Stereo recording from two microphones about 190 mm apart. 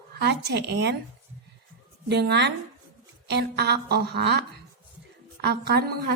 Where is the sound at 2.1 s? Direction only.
60° right (ahead or behind).